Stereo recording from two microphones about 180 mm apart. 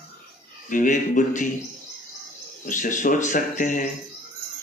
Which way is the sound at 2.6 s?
45° left (ahead or behind).